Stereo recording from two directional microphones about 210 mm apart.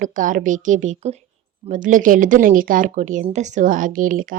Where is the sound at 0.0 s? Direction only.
40° right (ahead or behind).